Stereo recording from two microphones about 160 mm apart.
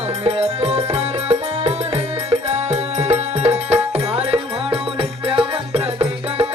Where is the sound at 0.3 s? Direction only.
40° right (ahead or behind).